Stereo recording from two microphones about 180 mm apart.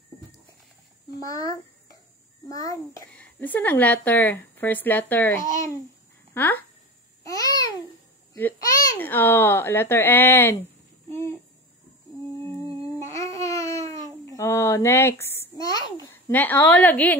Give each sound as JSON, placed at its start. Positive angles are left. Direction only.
{"t": 1.1, "sound": "a child's voice", "side_deg": 20}
{"t": 3.1, "sound": "a woman's voice", "side_deg": 10}
{"t": 7.2, "sound": "babbling", "side_deg": 20}
{"t": 8.4, "sound": "a woman's voice", "side_deg": 10}
{"t": 12.5, "sound": "humming", "side_deg": -30}
{"t": 13.5, "sound": "a sound", "side_deg": 15}
{"t": 15.5, "sound": "a woman's voice", "side_deg": 20}